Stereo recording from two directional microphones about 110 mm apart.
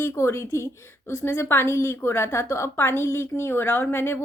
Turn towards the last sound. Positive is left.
turn(degrees=20)  # may be behind; listen again after turning